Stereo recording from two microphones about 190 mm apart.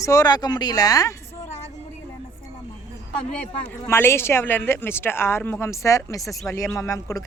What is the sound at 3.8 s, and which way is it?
Speech, 15° left (ahead or behind).